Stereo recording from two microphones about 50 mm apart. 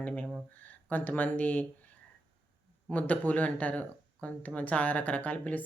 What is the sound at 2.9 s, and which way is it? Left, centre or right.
Speech, left.